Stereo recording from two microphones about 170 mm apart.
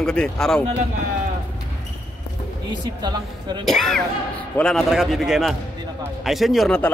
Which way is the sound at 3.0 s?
25° right (ahead or behind).